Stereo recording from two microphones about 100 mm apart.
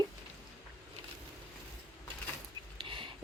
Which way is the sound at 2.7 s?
55° right (ahead or behind).